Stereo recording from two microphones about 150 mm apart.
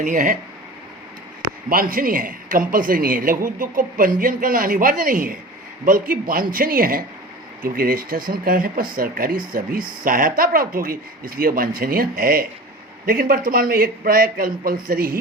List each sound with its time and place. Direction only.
0.0 s speech: 60° right (ahead or behind)
1.7 s speech: 70° right (ahead or behind)